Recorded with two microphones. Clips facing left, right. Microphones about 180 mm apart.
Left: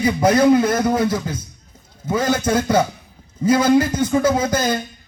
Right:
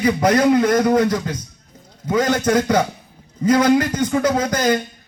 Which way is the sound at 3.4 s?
10° left (ahead or behind).